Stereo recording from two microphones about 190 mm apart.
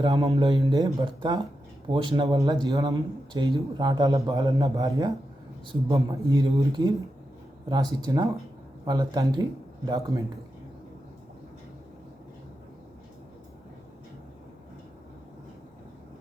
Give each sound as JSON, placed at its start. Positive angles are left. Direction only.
{"t": 0.0, "sound": "a man's voice", "side_deg": -20}